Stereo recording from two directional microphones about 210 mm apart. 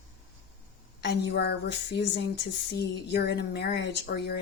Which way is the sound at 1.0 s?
55° left (ahead or behind).